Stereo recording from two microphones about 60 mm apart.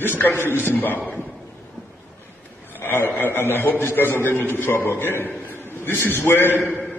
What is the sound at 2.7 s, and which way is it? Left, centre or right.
A man's voice, left.